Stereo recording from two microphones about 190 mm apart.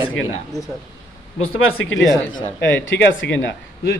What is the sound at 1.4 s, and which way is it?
Speech, 90° left.